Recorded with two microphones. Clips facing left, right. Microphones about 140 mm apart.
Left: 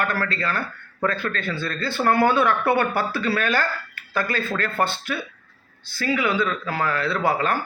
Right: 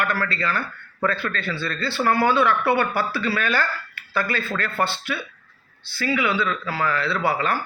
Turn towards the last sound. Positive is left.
turn(degrees=45)  # may be behind; listen again after turning